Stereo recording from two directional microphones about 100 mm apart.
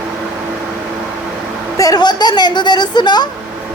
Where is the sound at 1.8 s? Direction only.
40° left (ahead or behind).